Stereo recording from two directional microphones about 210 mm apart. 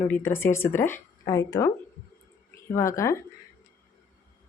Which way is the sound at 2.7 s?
15° left (ahead or behind).